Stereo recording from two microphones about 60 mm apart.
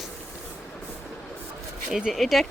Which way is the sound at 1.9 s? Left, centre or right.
Centre.